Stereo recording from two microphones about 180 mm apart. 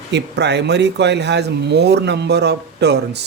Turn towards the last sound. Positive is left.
turn(degrees=-70)  # may be behind; listen again after turning